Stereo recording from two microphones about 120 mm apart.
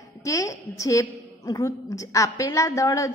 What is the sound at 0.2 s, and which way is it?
A woman's voice, 25° left (ahead or behind).